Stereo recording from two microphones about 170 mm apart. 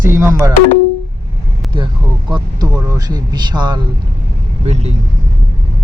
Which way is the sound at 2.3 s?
25° right (ahead or behind).